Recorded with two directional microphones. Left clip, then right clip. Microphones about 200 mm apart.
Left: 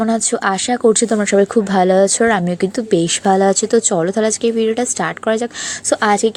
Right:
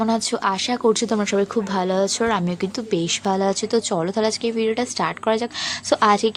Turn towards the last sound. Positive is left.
turn(degrees=15)  # may be behind; listen again after turning